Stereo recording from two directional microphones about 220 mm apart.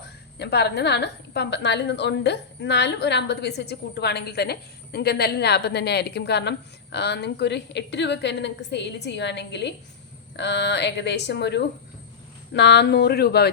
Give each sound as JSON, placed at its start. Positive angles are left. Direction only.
{"t": 0.0, "sound": "a woman's voice", "side_deg": 50}